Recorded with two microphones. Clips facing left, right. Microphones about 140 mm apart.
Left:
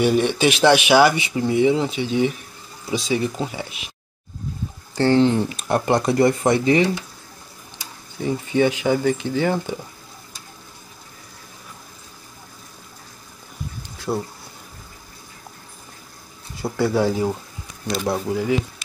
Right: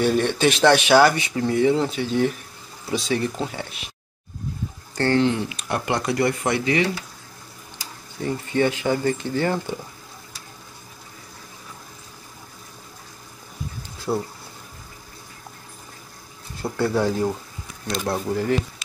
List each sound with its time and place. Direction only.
0.0 s speech: 5° left (ahead or behind)
5.1 s speech: 35° left (ahead or behind)
5.9 s speech: 25° left (ahead or behind)
8.5 s speech: 10° left (ahead or behind)
14.1 s speech: 5° right (ahead or behind)
16.6 s speech: 10° left (ahead or behind)